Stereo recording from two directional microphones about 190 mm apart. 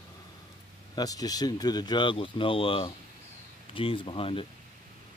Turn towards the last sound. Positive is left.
turn(degrees=30)  # may be behind; listen again after turning